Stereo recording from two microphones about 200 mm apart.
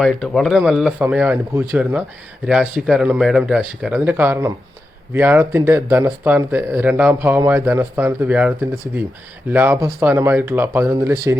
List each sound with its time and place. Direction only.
0.0 s speech: centre (ahead or behind); by 11.3 s 15° right (ahead or behind)